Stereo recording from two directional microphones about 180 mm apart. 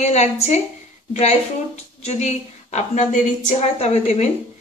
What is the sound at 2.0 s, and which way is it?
A woman's voice, 40° left (ahead or behind).